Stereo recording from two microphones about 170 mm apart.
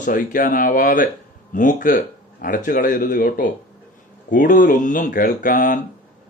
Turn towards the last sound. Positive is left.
turn(degrees=50)  # may be behind; listen again after turning